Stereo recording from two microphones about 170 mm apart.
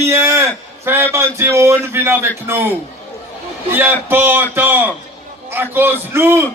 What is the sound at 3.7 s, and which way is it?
Speech, 10° right (ahead or behind).